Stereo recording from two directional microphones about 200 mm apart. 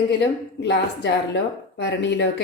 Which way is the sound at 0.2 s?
60° left (ahead or behind).